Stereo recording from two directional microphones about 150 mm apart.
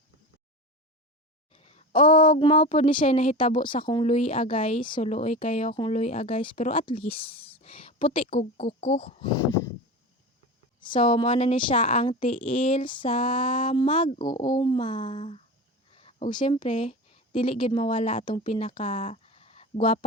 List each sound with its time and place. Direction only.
1.5 s a sound: 40° left (ahead or behind)
2.0 s speech: 35° left (ahead or behind)
4.0 s speech: 45° left (ahead or behind)
5.1 s speech: 50° left (ahead or behind)
10.8 s a sound: 30° left (ahead or behind)
11.1 s speech: 35° left (ahead or behind)
12.3 s speech: 55° left (ahead or behind)
12.5 s speech: 40° left (ahead or behind)
16.0 s a sound: 40° left (ahead or behind)
16.3 s speech: 35° left (ahead or behind)
18.3 s speech: 35° left (ahead or behind)